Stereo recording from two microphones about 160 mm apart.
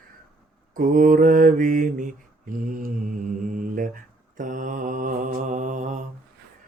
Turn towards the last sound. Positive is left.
turn(degrees=-50)  # may be behind; listen again after turning